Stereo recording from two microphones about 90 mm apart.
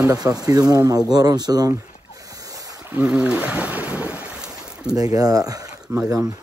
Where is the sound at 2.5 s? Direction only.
40° right (ahead or behind).